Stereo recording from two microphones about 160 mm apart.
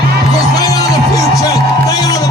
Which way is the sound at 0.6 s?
25° left (ahead or behind).